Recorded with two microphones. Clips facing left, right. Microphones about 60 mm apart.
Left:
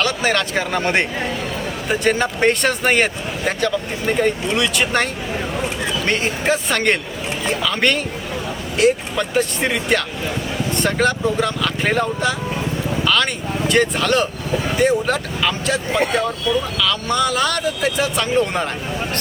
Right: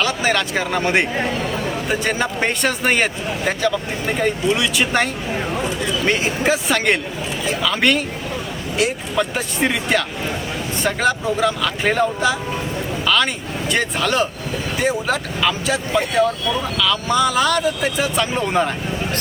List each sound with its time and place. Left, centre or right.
0.0 s speech: centre
6.1 s speech: centre
13.7 s speech: centre